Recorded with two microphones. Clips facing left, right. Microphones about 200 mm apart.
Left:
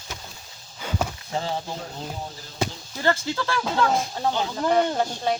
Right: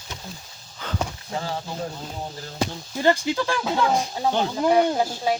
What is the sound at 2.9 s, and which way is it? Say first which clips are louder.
Speech: right 5 dB; 15° right (ahead or behind).